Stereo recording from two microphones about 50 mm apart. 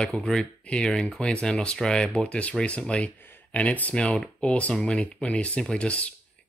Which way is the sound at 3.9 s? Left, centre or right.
Centre.